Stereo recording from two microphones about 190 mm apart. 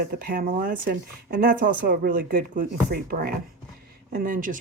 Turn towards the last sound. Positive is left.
turn(degrees=-45)  # may be behind; listen again after turning